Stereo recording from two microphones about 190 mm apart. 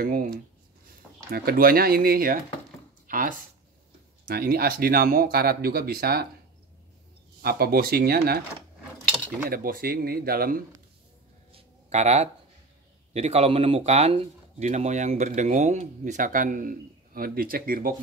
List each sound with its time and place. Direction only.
0.0 s speech: 50° right (ahead or behind)
7.4 s speech: 55° right (ahead or behind)
9.5 s speech: 50° right (ahead or behind)
11.5 s a sound: 35° right (ahead or behind)
13.1 s speech: 35° right (ahead or behind)